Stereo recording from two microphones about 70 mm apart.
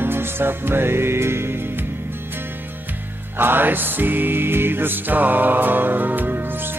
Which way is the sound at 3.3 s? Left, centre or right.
Right.